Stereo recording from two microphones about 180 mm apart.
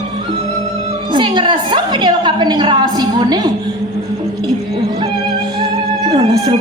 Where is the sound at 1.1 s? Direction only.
25° right (ahead or behind).